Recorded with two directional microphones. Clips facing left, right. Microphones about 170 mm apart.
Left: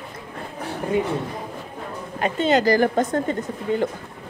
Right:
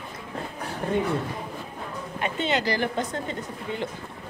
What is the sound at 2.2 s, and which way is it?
A woman's voice, 40° left (ahead or behind).